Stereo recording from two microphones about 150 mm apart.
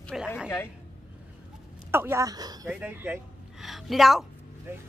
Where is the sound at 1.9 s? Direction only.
15° right (ahead or behind).